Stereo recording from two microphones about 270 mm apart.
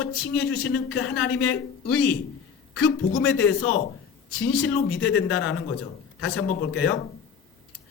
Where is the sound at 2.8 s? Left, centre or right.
Left.